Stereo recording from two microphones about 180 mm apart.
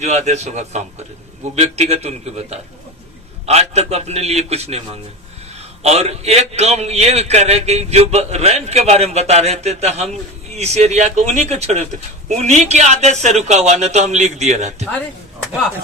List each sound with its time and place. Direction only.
0.0 s a man's voice: 40° right (ahead or behind)